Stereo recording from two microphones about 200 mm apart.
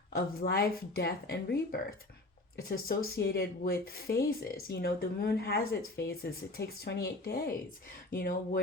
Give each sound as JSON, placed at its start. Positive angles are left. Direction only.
{"t": 0.1, "sound": "speech", "side_deg": 50}